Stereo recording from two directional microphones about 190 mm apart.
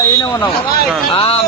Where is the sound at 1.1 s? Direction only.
30° left (ahead or behind).